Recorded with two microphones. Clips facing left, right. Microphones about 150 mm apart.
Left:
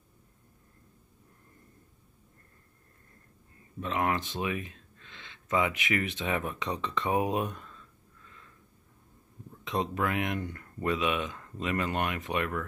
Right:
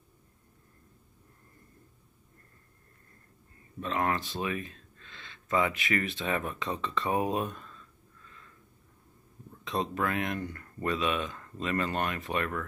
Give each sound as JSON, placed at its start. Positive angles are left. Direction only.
{"t": 3.8, "sound": "speech", "side_deg": 15}
{"t": 9.7, "sound": "speech", "side_deg": 15}